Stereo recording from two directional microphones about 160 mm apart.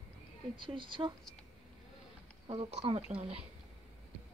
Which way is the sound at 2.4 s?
35° right (ahead or behind).